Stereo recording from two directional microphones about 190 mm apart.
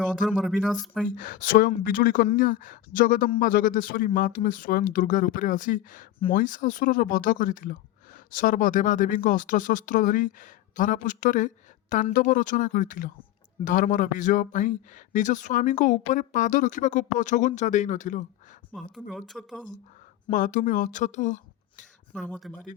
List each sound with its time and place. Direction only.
0.0 s speech: centre (ahead or behind)
1.0 s a man's voice: 45° left (ahead or behind)
18.7 s speech: 5° left (ahead or behind)
20.3 s a man's voice: 45° left (ahead or behind)
22.1 s speech: 5° left (ahead or behind)